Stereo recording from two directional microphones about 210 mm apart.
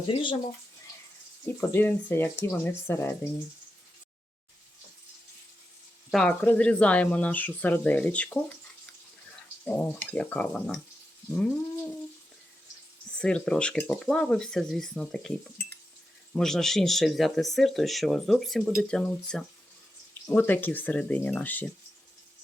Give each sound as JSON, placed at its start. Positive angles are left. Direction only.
{"t": 0.1, "sound": "speech", "side_deg": 25}
{"t": 1.5, "sound": "speech", "side_deg": 10}
{"t": 6.1, "sound": "speech", "side_deg": 0}
{"t": 13.1, "sound": "speech", "side_deg": 5}